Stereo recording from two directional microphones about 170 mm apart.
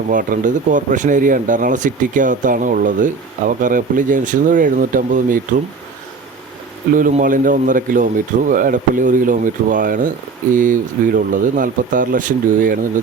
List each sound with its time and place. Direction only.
0.1 s speech: 55° right (ahead or behind)
6.9 s speech: 50° right (ahead or behind)